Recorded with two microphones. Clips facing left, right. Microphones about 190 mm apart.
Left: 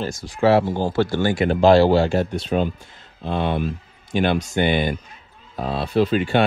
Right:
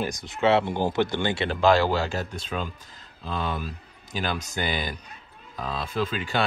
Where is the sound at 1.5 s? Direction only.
45° left (ahead or behind).